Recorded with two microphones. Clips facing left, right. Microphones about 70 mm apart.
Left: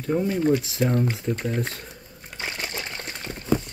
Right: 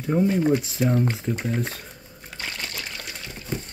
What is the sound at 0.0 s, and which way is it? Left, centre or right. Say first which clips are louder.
Speech: right 2 dB; centre.